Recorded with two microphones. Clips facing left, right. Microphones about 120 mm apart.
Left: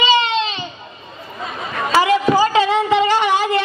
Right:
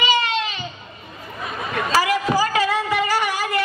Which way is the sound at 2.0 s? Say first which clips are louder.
Left 6 dB; 25° left (ahead or behind).